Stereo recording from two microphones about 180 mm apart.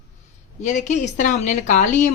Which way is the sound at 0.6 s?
40° left (ahead or behind).